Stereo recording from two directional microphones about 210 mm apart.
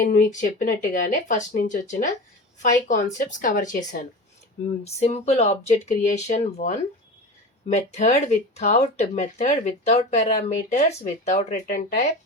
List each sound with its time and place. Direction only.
0.3 s speech: 35° left (ahead or behind)